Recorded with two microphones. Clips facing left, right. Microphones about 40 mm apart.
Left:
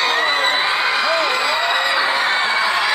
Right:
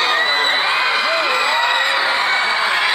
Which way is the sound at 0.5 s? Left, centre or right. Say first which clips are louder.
Right 1 dB; centre.